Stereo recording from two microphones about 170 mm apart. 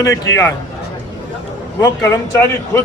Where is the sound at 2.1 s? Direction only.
15° left (ahead or behind).